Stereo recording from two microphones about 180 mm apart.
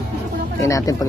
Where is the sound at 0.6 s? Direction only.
20° left (ahead or behind).